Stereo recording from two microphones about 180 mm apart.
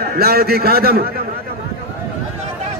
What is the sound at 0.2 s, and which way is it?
Speech, 60° right (ahead or behind).